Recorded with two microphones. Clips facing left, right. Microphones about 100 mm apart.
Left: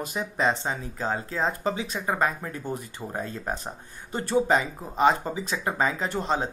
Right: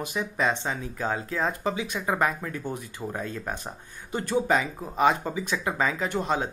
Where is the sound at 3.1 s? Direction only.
15° left (ahead or behind).